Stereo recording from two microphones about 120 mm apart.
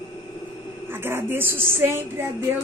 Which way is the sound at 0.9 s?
20° right (ahead or behind).